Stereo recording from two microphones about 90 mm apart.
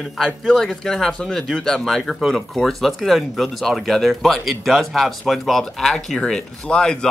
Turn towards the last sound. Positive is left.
turn(degrees=10)  # may be behind; listen again after turning